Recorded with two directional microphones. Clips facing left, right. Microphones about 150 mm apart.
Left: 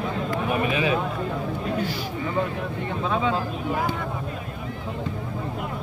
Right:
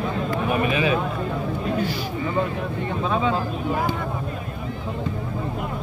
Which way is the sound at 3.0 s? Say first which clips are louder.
Right 1 dB; 35° right (ahead or behind).